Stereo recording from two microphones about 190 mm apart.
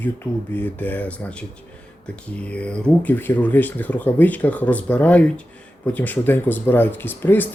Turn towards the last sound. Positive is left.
turn(degrees=10)  # may be behind; listen again after turning